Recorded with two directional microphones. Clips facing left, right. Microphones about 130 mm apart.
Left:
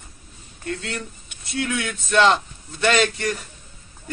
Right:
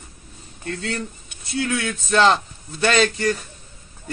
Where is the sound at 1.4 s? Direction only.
30° right (ahead or behind).